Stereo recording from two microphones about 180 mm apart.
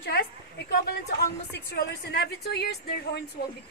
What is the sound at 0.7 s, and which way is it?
A woman's voice, 65° left (ahead or behind).